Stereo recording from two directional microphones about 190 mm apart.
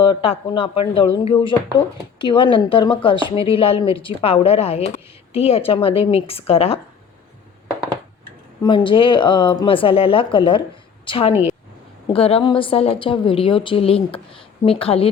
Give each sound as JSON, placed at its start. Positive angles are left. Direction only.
{"t": 0.0, "sound": "a woman's voice", "side_deg": 30}
{"t": 8.6, "sound": "a woman's voice", "side_deg": 25}